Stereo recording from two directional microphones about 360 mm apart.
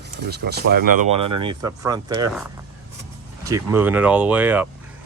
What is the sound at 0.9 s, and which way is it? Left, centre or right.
Speech, right.